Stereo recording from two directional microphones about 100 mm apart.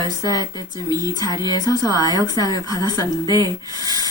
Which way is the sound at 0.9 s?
40° right (ahead or behind).